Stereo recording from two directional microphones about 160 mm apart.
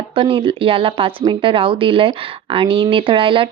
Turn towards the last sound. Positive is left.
turn(degrees=-35)  # may be behind; listen again after turning